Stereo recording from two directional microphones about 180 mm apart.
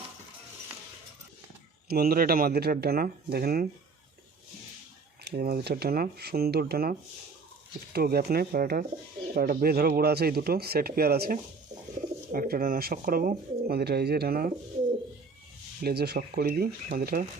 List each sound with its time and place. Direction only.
1.9 s speech: 55° right (ahead or behind)
5.2 s speech: 55° right (ahead or behind)
7.9 s speech: 60° right (ahead or behind)
15.8 s speech: 60° right (ahead or behind)